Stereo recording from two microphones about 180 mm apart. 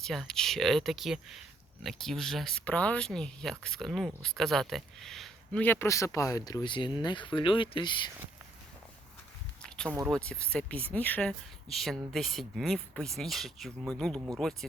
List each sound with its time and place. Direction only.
0.0 s speech: centre (ahead or behind); by 8.1 s 25° left (ahead or behind)
9.6 s a sound: 5° left (ahead or behind)
10.1 s speech: 5° left (ahead or behind)